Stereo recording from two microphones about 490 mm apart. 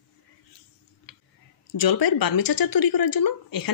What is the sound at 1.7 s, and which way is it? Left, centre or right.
Speech, left.